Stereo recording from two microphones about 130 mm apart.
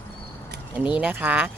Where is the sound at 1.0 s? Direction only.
15° right (ahead or behind).